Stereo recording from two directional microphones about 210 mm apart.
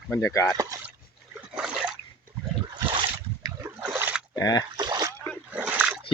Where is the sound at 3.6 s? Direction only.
10° right (ahead or behind).